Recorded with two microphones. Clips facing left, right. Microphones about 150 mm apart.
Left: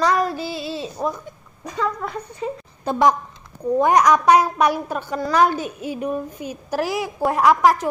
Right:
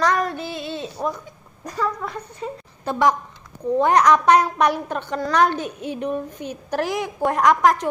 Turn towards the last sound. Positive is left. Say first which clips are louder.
# left 1 dB
turn(degrees=5)  # may be behind; listen again after turning